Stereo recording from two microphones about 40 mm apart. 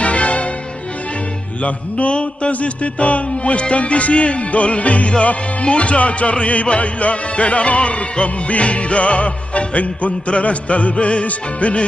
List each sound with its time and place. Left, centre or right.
0.0 s music: left
1.6 s music: left